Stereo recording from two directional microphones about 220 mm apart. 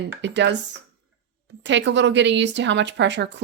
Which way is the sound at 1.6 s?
55° right (ahead or behind).